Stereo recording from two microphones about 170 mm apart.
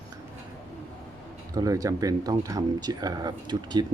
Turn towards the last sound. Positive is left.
turn(degrees=-25)  # may be behind; listen again after turning